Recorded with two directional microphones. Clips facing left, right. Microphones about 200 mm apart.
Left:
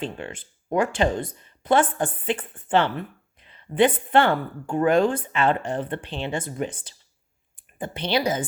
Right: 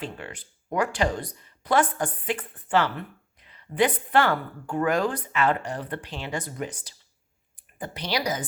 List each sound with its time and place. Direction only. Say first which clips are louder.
0.0 s a woman's voice: left 4 dB; 25° left (ahead or behind)